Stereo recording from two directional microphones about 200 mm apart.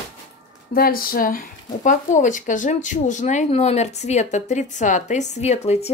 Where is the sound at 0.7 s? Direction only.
50° left (ahead or behind).